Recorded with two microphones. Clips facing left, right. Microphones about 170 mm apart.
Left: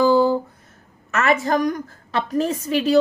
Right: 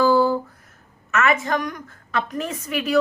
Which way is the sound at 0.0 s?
20° left (ahead or behind).